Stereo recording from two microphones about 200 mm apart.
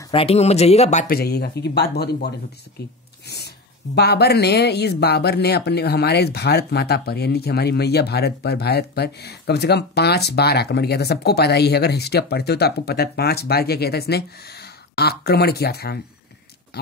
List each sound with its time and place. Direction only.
0.1 s speech: 30° left (ahead or behind)
1.1 s speech: 50° left (ahead or behind)